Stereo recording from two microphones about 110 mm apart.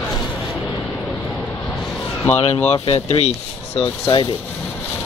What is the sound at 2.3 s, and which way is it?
Speech, 70° left (ahead or behind).